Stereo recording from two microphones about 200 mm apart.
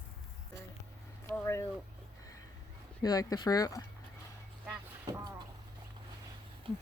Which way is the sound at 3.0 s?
20° left (ahead or behind).